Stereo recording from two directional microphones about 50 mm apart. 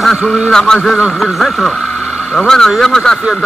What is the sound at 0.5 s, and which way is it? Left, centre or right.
Speech, centre.